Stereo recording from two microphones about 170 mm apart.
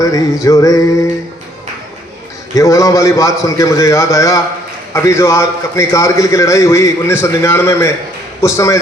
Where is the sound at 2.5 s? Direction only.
20° left (ahead or behind).